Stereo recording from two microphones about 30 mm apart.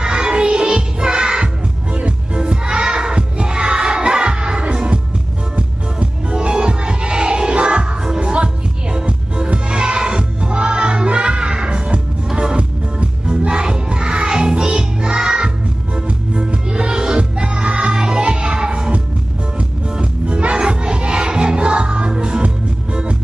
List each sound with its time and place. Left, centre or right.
0.0 s music: right
20.0 s music: right